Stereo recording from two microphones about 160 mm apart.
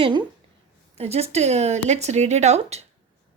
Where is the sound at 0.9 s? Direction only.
40° right (ahead or behind).